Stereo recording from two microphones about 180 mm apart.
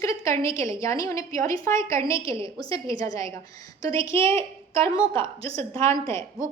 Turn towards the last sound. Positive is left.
turn(degrees=15)  # may be behind; listen again after turning